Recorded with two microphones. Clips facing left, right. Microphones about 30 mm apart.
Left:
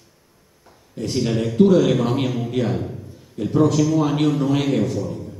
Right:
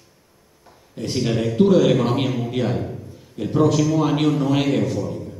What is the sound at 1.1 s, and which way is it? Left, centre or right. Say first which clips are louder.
Speech: even; centre.